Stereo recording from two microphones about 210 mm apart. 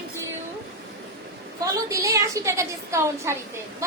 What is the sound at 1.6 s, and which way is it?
A woman's voice, 15° right (ahead or behind).